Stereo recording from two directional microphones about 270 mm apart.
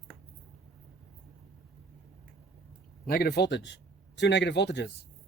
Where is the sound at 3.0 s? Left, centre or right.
Left.